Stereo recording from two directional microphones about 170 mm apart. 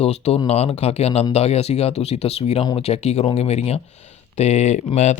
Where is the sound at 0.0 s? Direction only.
35° left (ahead or behind).